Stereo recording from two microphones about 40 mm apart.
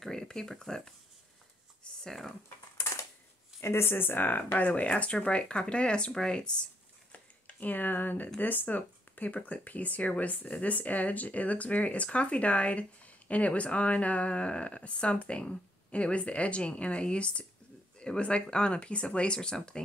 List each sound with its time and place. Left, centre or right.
0.0 s speech: centre
2.0 s speech: centre
3.6 s speech: left; by 6.5 s centre
7.1 s a sound: left
8.4 s speech: left